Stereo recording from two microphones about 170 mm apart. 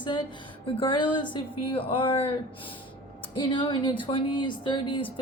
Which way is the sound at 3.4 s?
25° left (ahead or behind).